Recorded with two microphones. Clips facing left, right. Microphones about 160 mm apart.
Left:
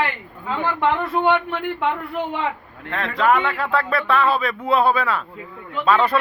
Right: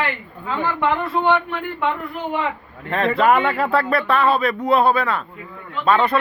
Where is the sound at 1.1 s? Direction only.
15° left (ahead or behind).